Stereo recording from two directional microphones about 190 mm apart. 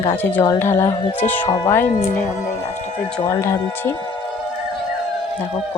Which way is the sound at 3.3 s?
15° left (ahead or behind).